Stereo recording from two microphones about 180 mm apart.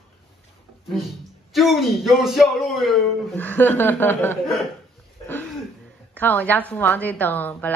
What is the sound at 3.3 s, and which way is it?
A woman's voice, 10° left (ahead or behind).